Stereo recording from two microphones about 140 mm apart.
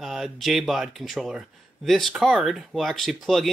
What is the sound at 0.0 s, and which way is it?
Speech, centre (ahead or behind).